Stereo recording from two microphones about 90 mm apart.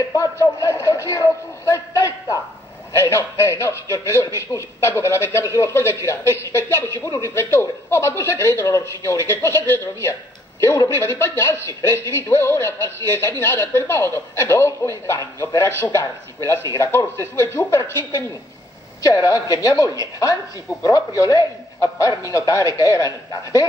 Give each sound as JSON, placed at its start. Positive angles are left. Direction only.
{"t": 0.1, "sound": "speech", "side_deg": 40}
{"t": 16.8, "sound": "speech", "side_deg": 30}
{"t": 19.0, "sound": "speech", "side_deg": 40}